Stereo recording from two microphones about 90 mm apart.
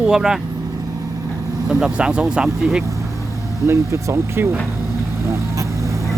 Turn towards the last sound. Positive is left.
turn(degrees=-30)  # may be behind; listen again after turning